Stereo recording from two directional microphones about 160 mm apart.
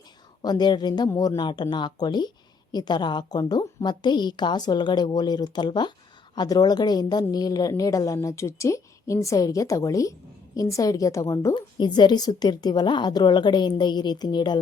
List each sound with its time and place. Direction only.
0.4 s a woman's voice: 25° left (ahead or behind)